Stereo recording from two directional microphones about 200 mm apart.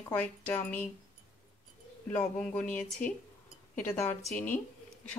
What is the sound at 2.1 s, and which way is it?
Speech, 5° left (ahead or behind).